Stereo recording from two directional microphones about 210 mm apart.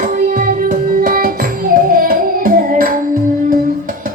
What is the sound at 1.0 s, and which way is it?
Music, 45° right (ahead or behind).